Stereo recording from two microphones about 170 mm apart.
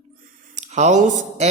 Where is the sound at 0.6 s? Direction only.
45° right (ahead or behind).